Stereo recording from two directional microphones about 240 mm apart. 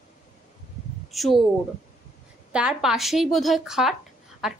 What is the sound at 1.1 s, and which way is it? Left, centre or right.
Speech, centre.